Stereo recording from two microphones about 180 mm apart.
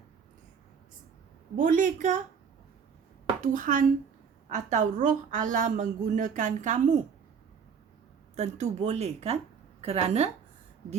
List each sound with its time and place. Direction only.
1.5 s a woman's voice: 45° right (ahead or behind)
3.4 s a woman's voice: 50° right (ahead or behind)
8.4 s a woman's voice: 40° right (ahead or behind)